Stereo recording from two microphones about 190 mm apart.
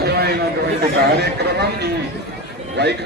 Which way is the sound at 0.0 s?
55° right (ahead or behind).